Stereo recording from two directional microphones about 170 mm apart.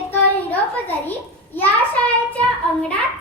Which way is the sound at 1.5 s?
10° left (ahead or behind).